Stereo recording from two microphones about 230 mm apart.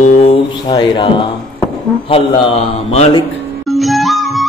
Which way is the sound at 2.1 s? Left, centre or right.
Left.